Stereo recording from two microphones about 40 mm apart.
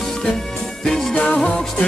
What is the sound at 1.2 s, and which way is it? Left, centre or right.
Music, left.